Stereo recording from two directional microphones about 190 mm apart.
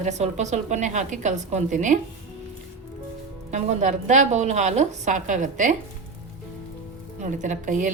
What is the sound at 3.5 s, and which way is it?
A woman's voice, 40° right (ahead or behind).